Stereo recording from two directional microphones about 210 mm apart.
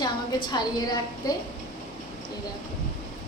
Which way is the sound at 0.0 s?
20° left (ahead or behind).